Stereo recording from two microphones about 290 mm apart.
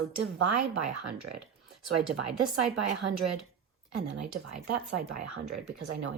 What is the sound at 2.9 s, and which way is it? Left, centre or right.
Speech, right.